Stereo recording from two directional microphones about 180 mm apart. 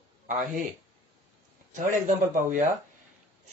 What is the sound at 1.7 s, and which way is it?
Speech, 45° right (ahead or behind).